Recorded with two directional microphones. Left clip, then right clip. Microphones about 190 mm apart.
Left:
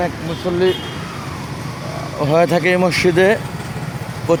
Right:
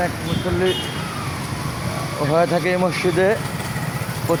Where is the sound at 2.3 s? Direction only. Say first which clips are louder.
Left 4 dB; 45° left (ahead or behind).